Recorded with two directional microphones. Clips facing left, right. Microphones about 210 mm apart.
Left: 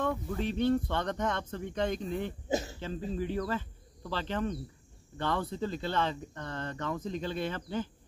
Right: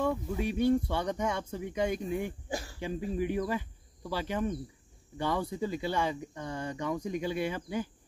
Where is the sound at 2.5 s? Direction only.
20° left (ahead or behind).